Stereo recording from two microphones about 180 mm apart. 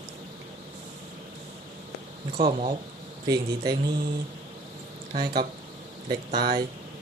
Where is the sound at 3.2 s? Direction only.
20° right (ahead or behind).